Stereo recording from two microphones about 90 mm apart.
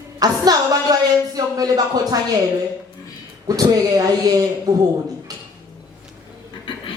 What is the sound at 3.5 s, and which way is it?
Speech, 45° right (ahead or behind).